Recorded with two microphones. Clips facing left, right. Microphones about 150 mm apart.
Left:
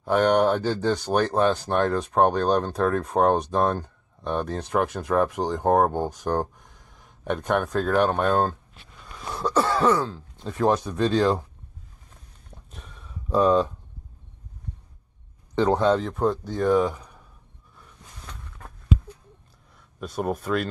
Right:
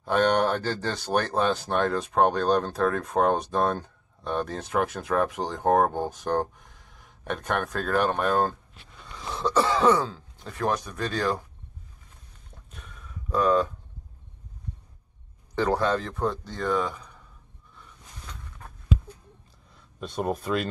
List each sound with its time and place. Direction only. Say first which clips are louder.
0.0 s speech: left 3 dB; 10° left (ahead or behind)
4.8 s speech: left 2 dB; centre (ahead or behind)
5.1 s speech: left 4 dB; 10° left (ahead or behind)
8.2 s speech: left 2 dB; 25° left (ahead or behind)
9.3 s speech: left 1 dB; 5° left (ahead or behind)
10.9 s speech: left 6 dB; 20° left (ahead or behind)
12.7 s a sound: left 1 dB; 30° left (ahead or behind)
15.5 s speech: left 4 dB; 20° left (ahead or behind)
20.0 s speech: left 1 dB; 5° left (ahead or behind)